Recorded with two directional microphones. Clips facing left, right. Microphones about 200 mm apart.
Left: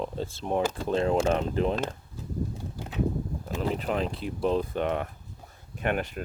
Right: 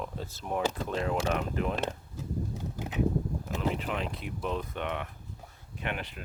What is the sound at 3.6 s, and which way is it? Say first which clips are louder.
Speech: left 5 dB; 40° left (ahead or behind).